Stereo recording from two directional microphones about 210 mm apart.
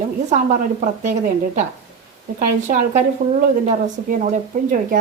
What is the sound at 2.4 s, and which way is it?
Speech, 40° right (ahead or behind).